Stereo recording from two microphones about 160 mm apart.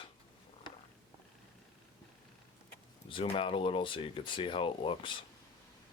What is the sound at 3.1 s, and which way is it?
Speech, 35° left (ahead or behind).